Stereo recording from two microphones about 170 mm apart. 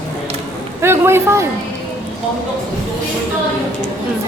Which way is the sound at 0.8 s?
15° right (ahead or behind).